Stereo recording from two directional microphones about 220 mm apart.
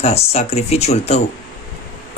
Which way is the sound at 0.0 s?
30° left (ahead or behind).